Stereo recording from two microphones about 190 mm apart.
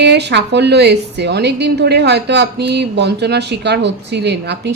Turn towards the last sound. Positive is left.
turn(degrees=-60)  # may be behind; listen again after turning